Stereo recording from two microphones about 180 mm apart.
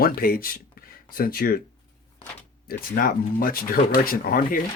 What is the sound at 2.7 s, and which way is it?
Speech, 55° left (ahead or behind).